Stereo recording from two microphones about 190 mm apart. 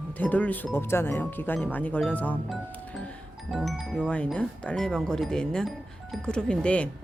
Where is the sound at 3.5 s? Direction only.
Centre (ahead or behind).